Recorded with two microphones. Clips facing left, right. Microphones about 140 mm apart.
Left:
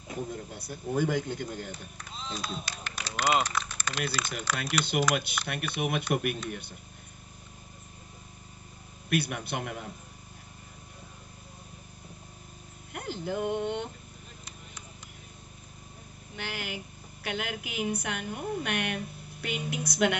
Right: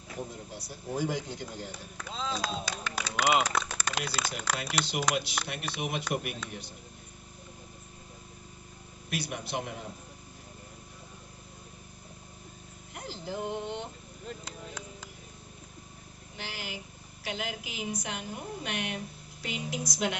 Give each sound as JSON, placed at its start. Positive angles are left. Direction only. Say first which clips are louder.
{"t": 0.5, "sound": "a woman's voice", "louder": "left 3 dB", "side_deg": 55}
{"t": 2.0, "sound": "speech", "louder": "right 4 dB", "side_deg": -90}
{"t": 3.6, "sound": "a sound", "louder": "right 2 dB", "side_deg": -90}
{"t": 4.6, "sound": "a woman's voice", "louder": "left 6 dB", "side_deg": 55}
{"t": 9.1, "sound": "a woman's voice", "louder": "left 4 dB", "side_deg": 60}
{"t": 12.9, "sound": "speech", "louder": "left 4 dB", "side_deg": 60}
{"t": 14.2, "sound": "a sound", "louder": "right 8 dB", "side_deg": -90}
{"t": 16.3, "sound": "a woman's voice", "louder": "left 4 dB", "side_deg": 60}